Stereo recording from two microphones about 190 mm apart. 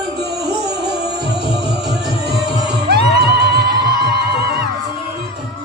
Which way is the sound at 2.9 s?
60° right (ahead or behind).